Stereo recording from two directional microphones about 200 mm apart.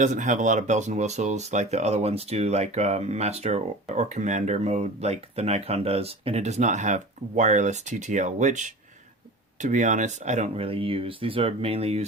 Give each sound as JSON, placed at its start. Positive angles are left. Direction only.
{"t": 0.0, "sound": "speech", "side_deg": -40}